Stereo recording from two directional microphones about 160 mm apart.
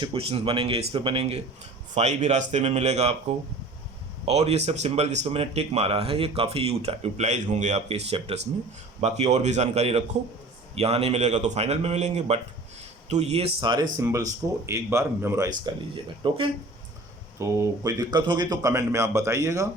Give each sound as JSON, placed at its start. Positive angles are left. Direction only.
{"t": 0.0, "sound": "a man's voice", "side_deg": -35}
{"t": 15.7, "sound": "speech", "side_deg": -25}
{"t": 17.3, "sound": "speech", "side_deg": -20}